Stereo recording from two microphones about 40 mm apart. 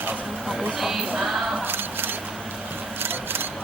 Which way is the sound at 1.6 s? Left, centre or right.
Right.